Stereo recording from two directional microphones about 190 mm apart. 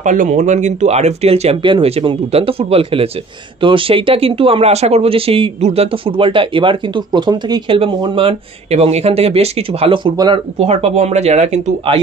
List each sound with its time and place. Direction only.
0.0 s speech: 40° right (ahead or behind)